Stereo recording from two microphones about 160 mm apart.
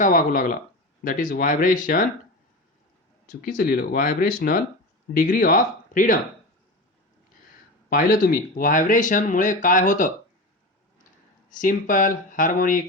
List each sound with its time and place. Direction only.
0.0 s speech: 55° left (ahead or behind)
3.4 s speech: 65° left (ahead or behind)
7.9 s speech: 65° left (ahead or behind)
11.4 s speech: 55° left (ahead or behind)